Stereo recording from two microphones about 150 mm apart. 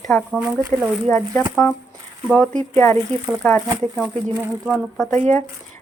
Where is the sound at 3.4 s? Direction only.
10° left (ahead or behind).